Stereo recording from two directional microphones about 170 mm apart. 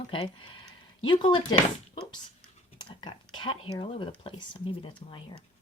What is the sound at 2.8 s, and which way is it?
Speech, 25° left (ahead or behind).